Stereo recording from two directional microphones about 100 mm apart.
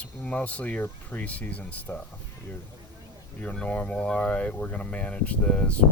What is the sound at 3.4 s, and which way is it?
Speech, 15° left (ahead or behind).